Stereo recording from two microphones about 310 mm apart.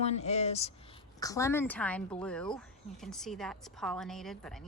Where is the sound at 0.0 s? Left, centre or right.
Left.